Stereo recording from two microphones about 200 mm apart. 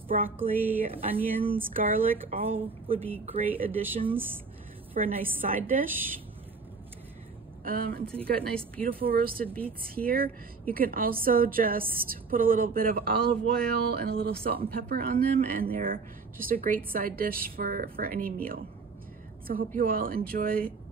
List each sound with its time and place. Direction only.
0.1 s speech: 40° right (ahead or behind)
0.8 s speech: 30° right (ahead or behind)
1.7 s speech: 40° right (ahead or behind)
2.3 s speech: 30° right (ahead or behind)
4.9 s speech: 40° right (ahead or behind)
7.6 s speech: 50° right (ahead or behind)
8.1 s a woman's voice: 5° left (ahead or behind)
8.8 s speech: 45° right (ahead or behind)